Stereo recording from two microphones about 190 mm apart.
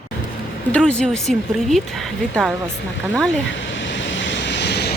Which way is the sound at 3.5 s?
75° left (ahead or behind).